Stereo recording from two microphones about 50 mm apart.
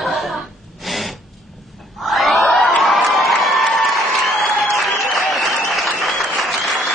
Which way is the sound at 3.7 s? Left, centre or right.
Centre.